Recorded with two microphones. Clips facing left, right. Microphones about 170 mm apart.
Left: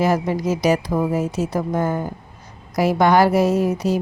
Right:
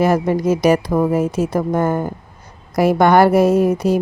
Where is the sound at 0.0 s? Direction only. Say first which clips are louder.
Right 4 dB; 55° right (ahead or behind).